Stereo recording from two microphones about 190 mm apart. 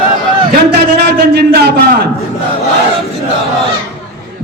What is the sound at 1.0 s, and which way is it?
Speech, 60° right (ahead or behind).